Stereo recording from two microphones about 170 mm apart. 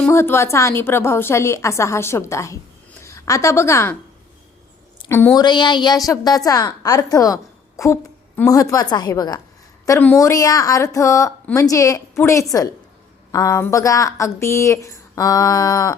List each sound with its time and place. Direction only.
0.0 s a woman's voice: 15° left (ahead or behind)
5.0 s a woman's voice: 15° left (ahead or behind)
8.4 s a woman's voice: 20° left (ahead or behind)